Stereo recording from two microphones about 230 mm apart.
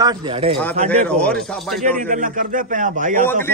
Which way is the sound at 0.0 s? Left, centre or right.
Centre.